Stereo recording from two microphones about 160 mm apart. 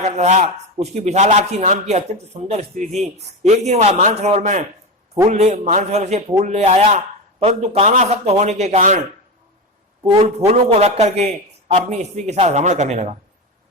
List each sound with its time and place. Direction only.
0.0 s a man's voice: 45° right (ahead or behind)
10.2 s a man's voice: 40° right (ahead or behind)